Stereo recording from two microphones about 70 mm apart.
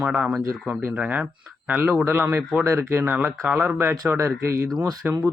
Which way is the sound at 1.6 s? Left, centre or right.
Right.